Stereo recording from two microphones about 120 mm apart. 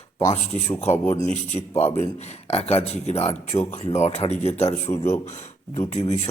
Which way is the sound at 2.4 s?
55° left (ahead or behind).